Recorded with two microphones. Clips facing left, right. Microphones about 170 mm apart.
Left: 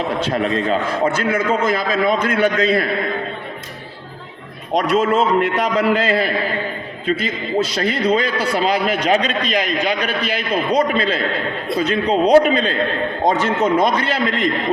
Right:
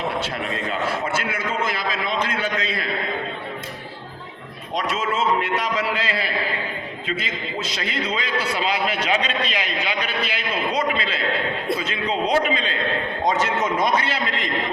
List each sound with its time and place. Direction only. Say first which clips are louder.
0.3 s speech: left 9 dB; 40° left (ahead or behind)
4.9 s a man's voice: left 7 dB; 60° left (ahead or behind)
7.8 s a man's voice: left 8 dB; 45° left (ahead or behind)
13.2 s a man's voice: left 5 dB; 55° left (ahead or behind)